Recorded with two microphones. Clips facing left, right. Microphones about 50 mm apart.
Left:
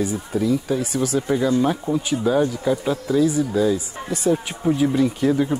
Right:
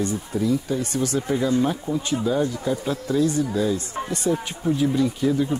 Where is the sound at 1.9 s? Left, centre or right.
Left.